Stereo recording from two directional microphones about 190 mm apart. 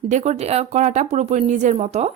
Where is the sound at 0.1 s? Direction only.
35° right (ahead or behind).